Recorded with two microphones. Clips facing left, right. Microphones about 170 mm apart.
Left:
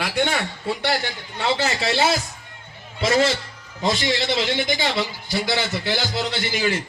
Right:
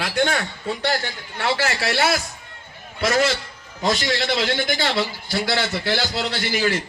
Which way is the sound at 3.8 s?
20° left (ahead or behind).